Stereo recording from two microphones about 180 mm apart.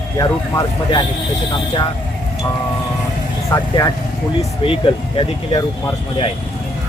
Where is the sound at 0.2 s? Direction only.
25° left (ahead or behind).